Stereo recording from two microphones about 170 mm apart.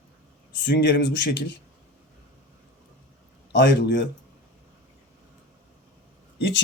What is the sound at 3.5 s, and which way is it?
Speech, 80° left.